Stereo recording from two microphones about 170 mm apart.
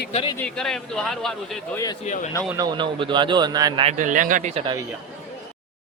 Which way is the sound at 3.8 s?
50° right (ahead or behind).